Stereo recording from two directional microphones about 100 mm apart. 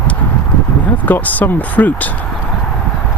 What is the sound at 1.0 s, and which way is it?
Speech, 15° left (ahead or behind).